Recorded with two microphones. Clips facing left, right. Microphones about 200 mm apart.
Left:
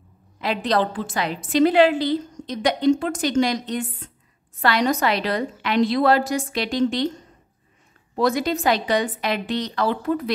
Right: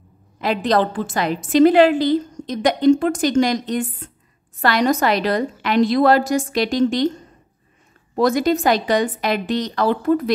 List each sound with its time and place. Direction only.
0.4 s a woman's voice: 45° right (ahead or behind)
8.2 s a woman's voice: 45° right (ahead or behind)